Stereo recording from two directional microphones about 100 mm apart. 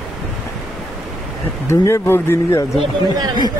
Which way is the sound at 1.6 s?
25° left (ahead or behind).